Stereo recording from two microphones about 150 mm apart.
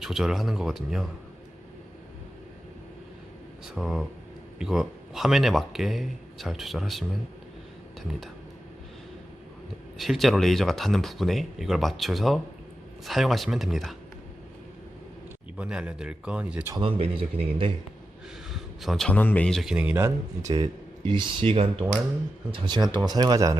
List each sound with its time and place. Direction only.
0.0 s a man's voice: centre (ahead or behind)
3.8 s a man's voice: centre (ahead or behind)
10.0 s a man's voice: centre (ahead or behind)
15.5 s a man's voice: 5° right (ahead or behind)
17.0 s speech: 40° right (ahead or behind)
18.5 s a man's voice: centre (ahead or behind)
20.5 s speech: 30° right (ahead or behind)